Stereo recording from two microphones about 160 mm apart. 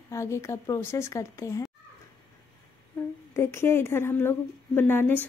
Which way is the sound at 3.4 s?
15° left (ahead or behind).